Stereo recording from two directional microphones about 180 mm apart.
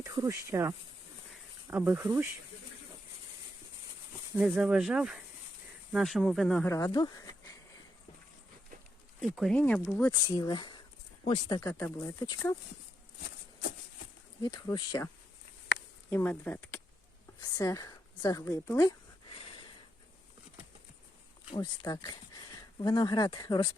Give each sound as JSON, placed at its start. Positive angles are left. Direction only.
{"t": 0.0, "sound": "speech", "side_deg": -20}
{"t": 1.7, "sound": "speech", "side_deg": -10}
{"t": 4.4, "sound": "speech", "side_deg": -5}
{"t": 6.7, "sound": "speech", "side_deg": 20}
{"t": 9.3, "sound": "speech", "side_deg": 0}
{"t": 10.0, "sound": "speech", "side_deg": 20}
{"t": 14.4, "sound": "a woman's voice", "side_deg": 25}
{"t": 19.5, "sound": "a sound", "side_deg": 30}
{"t": 21.5, "sound": "speech", "side_deg": 20}